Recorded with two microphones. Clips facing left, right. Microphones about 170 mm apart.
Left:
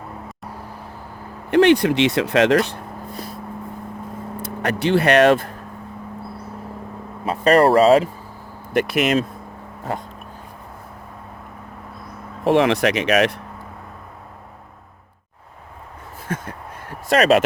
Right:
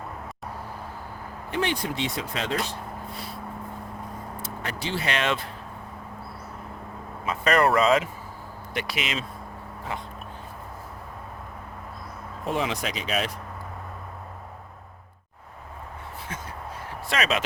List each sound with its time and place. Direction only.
1.5 s speech: 70° left (ahead or behind)
4.4 s speech: 60° left (ahead or behind)
7.3 s speech: 35° left (ahead or behind)
8.7 s speech: 50° left (ahead or behind)
12.5 s speech: 70° left (ahead or behind)
16.2 s crow: 55° left (ahead or behind)
17.1 s speech: 45° left (ahead or behind)